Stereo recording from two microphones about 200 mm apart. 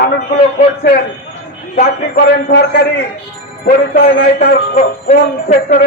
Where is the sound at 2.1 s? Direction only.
55° left (ahead or behind).